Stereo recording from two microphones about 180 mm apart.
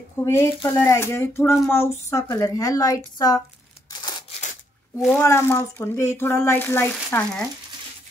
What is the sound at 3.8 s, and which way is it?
Tearing, 25° left (ahead or behind).